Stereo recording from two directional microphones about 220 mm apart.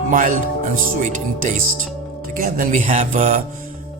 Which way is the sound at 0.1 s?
35° right (ahead or behind).